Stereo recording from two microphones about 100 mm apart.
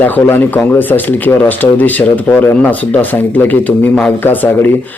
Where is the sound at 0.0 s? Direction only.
20° left (ahead or behind).